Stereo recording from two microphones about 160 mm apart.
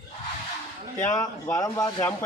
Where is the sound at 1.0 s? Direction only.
15° left (ahead or behind).